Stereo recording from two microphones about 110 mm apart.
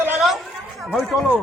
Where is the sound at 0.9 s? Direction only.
Centre (ahead or behind).